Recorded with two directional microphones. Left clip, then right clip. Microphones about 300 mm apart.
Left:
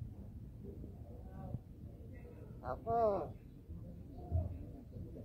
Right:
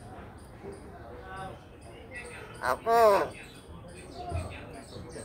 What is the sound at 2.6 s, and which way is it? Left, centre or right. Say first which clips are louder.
Speech: right 12 dB; right.